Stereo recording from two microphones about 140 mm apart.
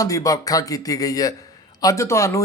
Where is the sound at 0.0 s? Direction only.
25° left (ahead or behind).